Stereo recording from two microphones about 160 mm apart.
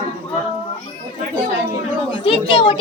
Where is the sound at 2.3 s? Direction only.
35° left (ahead or behind).